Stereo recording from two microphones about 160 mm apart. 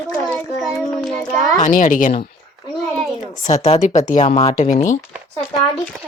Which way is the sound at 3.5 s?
45° left (ahead or behind).